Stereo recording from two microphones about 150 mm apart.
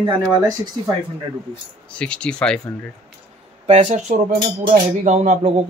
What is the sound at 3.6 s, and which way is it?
Speech, 45° right (ahead or behind).